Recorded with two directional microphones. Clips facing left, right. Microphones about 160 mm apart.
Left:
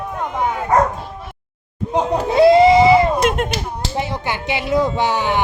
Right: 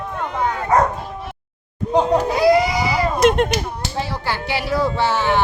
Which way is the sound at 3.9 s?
20° left (ahead or behind).